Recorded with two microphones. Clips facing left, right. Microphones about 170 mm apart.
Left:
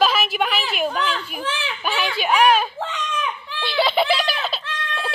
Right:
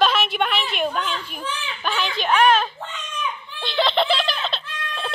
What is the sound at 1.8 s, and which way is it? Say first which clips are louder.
Speech: left 1 dB; 5° left (ahead or behind).